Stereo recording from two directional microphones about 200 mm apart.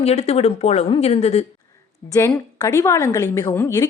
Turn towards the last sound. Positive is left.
turn(degrees=15)  # may be behind; listen again after turning